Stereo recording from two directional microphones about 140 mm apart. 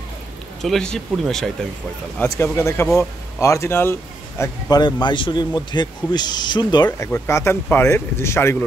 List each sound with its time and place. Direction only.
0.6 s speech: 5° left (ahead or behind)
2.1 s speech: 15° left (ahead or behind)
4.6 s speech: 30° left (ahead or behind)
7.1 s speech: 20° left (ahead or behind)